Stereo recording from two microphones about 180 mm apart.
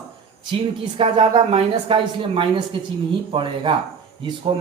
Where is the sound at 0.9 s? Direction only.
30° right (ahead or behind).